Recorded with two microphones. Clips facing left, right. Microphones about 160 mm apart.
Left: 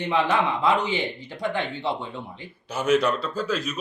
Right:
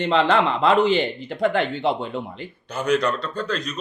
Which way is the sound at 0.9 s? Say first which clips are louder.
Right 6 dB; 55° right (ahead or behind).